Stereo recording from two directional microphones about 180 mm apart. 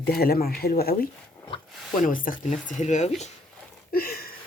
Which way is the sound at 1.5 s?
30° left (ahead or behind).